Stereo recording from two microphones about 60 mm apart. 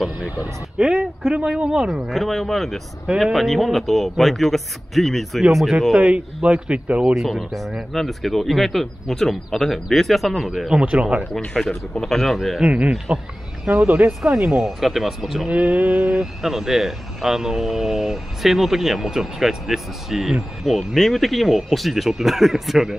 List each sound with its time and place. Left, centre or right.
0.8 s speech: right
1.7 s speech: centre
2.0 s speech: centre
5.9 s speech: right
7.2 s speech: centre
10.7 s speech: centre
11.3 s speech: centre
12.6 s speech: centre
14.2 s speech: centre
15.5 s speech: right
16.1 s speech: centre